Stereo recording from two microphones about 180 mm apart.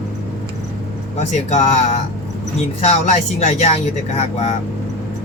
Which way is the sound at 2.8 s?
35° left (ahead or behind).